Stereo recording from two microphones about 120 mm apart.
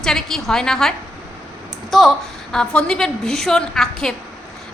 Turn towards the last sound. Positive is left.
turn(degrees=5)  # may be behind; listen again after turning